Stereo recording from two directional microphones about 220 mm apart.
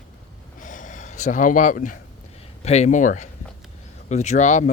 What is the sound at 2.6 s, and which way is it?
Speech, 30° left (ahead or behind).